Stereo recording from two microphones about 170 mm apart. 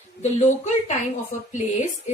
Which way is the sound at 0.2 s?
40° left (ahead or behind).